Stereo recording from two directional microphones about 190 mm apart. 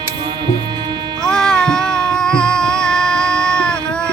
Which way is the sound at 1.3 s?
5° left (ahead or behind).